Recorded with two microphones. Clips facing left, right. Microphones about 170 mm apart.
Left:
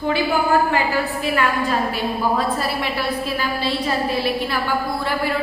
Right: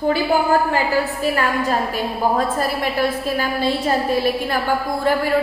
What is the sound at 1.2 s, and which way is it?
A woman's voice, 40° right (ahead or behind).